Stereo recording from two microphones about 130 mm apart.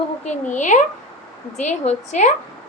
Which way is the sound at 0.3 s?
70° left (ahead or behind).